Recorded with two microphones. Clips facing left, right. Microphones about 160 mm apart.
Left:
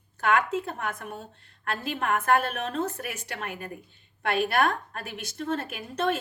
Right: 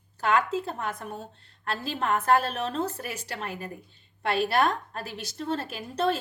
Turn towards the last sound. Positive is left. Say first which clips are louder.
# right 1 dB
turn(degrees=-30)  # may be behind; listen again after turning